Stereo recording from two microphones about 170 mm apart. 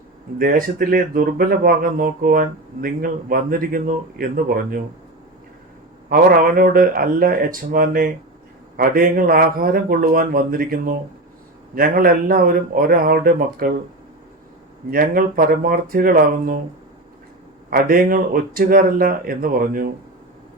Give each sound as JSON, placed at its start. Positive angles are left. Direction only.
{"t": 0.3, "sound": "speech", "side_deg": -60}
{"t": 6.1, "sound": "speech", "side_deg": -60}
{"t": 14.8, "sound": "speech", "side_deg": -55}
{"t": 17.7, "sound": "speech", "side_deg": -60}